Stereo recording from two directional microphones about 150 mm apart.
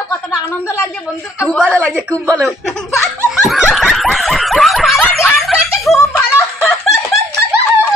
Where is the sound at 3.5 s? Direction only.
Centre (ahead or behind).